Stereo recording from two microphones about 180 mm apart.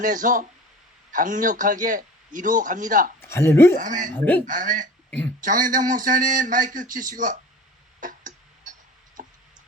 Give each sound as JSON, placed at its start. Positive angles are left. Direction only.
{"t": 0.0, "sound": "speech", "side_deg": -45}
{"t": 3.2, "sound": "speech", "side_deg": 15}
{"t": 3.8, "sound": "speech", "side_deg": -45}
{"t": 8.0, "sound": "a sound", "side_deg": -45}
{"t": 9.2, "sound": "tick", "side_deg": -50}